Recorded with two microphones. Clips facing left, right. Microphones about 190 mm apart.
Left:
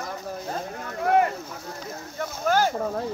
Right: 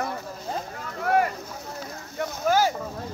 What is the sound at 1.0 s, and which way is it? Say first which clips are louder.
Speech: left 2 dB; 20° left (ahead or behind).